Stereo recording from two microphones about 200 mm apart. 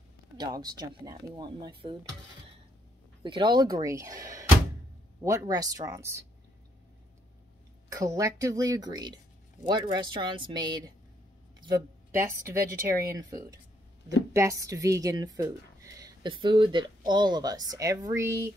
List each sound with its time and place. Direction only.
0.4 s speech: 20° right (ahead or behind)
3.3 s speech: 20° right (ahead or behind)
7.9 s speech: 15° right (ahead or behind)